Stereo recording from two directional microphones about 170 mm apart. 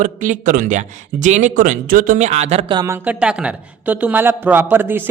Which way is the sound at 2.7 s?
20° right (ahead or behind).